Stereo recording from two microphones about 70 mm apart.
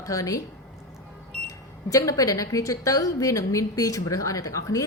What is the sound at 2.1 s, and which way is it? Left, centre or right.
A woman's voice, left.